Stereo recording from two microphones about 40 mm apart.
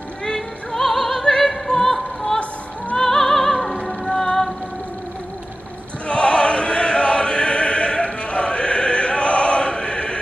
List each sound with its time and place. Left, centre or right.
0.2 s music: centre
0.7 s opera: centre
6.0 s opera: left